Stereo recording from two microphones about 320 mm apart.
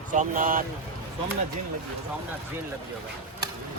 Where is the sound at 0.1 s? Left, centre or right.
Right.